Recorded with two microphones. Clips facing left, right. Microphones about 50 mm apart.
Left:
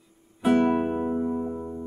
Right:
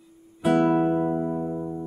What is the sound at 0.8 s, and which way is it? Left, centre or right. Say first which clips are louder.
Electric piano: right 3 dB; centre.